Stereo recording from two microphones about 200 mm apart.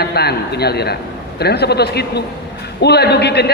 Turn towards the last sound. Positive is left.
turn(degrees=55)  # may be behind; listen again after turning